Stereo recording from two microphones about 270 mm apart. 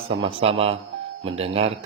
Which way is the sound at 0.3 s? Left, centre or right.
Right.